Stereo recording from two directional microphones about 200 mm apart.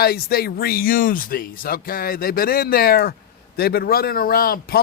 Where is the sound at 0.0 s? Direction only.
50° left (ahead or behind).